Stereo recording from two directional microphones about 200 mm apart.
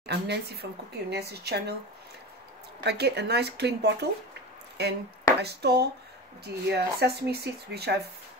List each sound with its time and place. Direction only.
0.0 s speech: 60° right (ahead or behind)
2.8 s speech: 55° right (ahead or behind)